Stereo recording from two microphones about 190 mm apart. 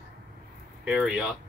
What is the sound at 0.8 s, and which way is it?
Speech, 5° right (ahead or behind).